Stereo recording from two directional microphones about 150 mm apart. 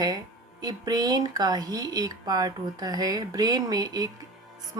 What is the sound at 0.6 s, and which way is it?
Speech, 25° right (ahead or behind).